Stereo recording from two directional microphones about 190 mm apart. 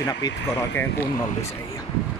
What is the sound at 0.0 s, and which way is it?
Speech, 20° left (ahead or behind).